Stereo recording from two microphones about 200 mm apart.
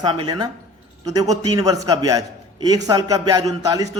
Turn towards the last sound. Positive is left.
turn(degrees=-20)  # may be behind; listen again after turning